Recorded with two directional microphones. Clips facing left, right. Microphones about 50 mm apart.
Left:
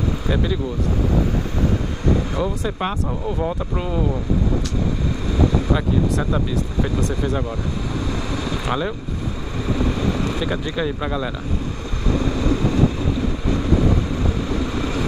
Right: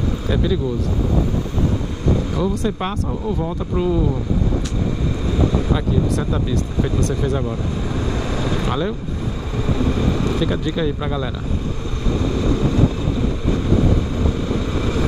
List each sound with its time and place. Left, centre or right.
0.3 s speech: centre
2.3 s speech: centre
3.3 s speech: centre
5.7 s speech: centre
8.6 s speech: centre
12.2 s vehicle: centre
14.7 s vehicle: centre